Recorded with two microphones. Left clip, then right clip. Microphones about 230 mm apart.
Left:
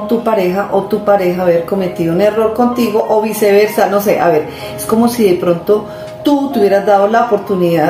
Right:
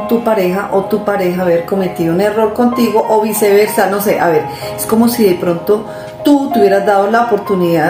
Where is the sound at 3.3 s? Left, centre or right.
Right.